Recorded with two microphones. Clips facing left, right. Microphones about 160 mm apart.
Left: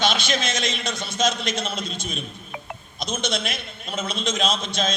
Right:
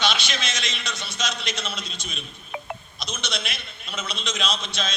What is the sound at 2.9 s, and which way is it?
A man's voice, 50° left (ahead or behind).